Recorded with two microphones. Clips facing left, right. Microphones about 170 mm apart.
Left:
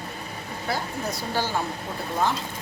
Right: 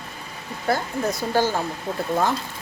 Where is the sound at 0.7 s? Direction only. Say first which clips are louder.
Right 6 dB; 50° right (ahead or behind).